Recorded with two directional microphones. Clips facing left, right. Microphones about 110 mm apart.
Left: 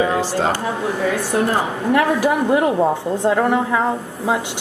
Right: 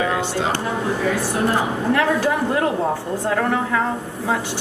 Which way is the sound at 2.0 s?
15° left (ahead or behind).